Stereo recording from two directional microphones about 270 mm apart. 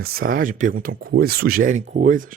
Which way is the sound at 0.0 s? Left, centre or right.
Right.